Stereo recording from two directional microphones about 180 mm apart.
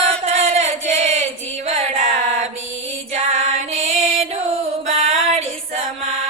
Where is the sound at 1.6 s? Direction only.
40° right (ahead or behind).